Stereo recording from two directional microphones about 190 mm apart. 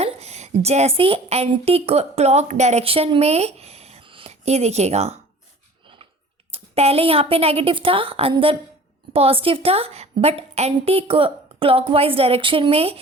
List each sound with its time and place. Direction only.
0.0 s a woman's voice: 35° right (ahead or behind)
6.5 s a woman's voice: 30° right (ahead or behind)